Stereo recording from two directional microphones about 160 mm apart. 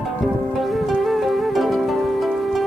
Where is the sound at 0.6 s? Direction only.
Centre (ahead or behind).